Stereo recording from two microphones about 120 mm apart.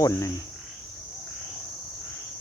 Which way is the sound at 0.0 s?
25° left (ahead or behind).